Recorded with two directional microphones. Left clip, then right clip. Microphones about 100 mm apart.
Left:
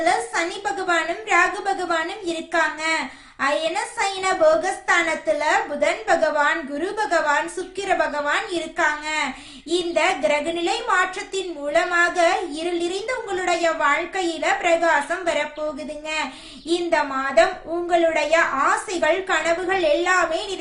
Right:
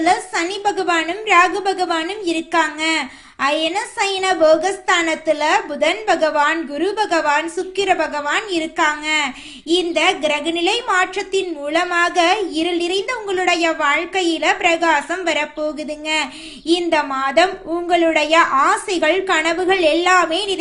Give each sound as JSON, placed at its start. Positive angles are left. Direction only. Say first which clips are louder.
{"t": 0.0, "sound": "a woman's voice", "louder": "right 3 dB", "side_deg": -30}
{"t": 16.6, "sound": "a woman's voice", "louder": "right 4 dB", "side_deg": -40}